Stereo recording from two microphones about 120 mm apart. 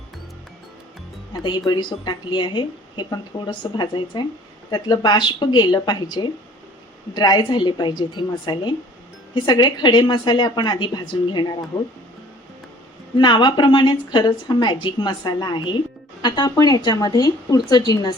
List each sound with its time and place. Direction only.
1.5 s speech: 40° left (ahead or behind)
13.1 s speech: 40° left (ahead or behind)